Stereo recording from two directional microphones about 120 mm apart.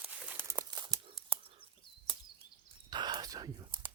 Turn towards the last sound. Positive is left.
turn(degrees=-35)  # may be behind; listen again after turning